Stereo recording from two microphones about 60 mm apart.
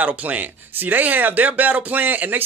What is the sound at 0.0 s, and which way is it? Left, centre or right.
Speech, right.